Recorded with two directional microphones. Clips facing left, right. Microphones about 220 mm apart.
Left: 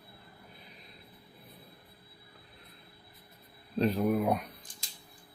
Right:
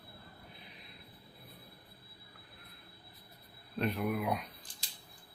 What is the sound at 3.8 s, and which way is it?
Speech, 35° left (ahead or behind).